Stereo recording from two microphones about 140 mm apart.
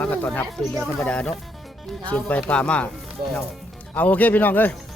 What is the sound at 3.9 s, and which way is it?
Speech, 10° left (ahead or behind).